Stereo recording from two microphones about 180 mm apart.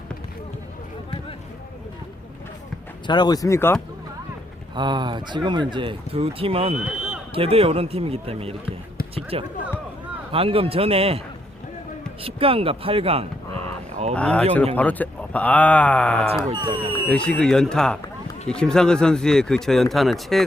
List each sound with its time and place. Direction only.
3.1 s speech: 25° left (ahead or behind)
4.7 s speech: 25° right (ahead or behind)
12.2 s speech: 30° right (ahead or behind)
14.2 s speech: 5° left (ahead or behind)
16.5 s speech: 25° right (ahead or behind)
17.1 s speech: 5° left (ahead or behind)